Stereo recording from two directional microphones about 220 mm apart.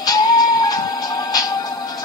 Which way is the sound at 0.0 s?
20° left (ahead or behind).